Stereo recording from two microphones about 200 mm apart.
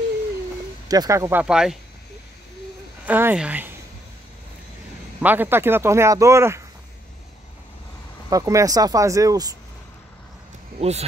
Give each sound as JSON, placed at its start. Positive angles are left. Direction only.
{"t": 0.8, "sound": "speech", "side_deg": -20}
{"t": 3.1, "sound": "speech", "side_deg": -10}
{"t": 5.2, "sound": "speech", "side_deg": -10}
{"t": 8.3, "sound": "speech", "side_deg": -15}
{"t": 10.8, "sound": "speech", "side_deg": -30}